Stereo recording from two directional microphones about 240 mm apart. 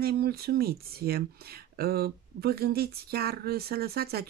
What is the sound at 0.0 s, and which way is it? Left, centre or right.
Speech, right.